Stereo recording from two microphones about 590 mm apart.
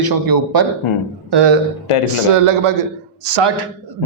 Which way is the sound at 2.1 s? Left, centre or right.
Right.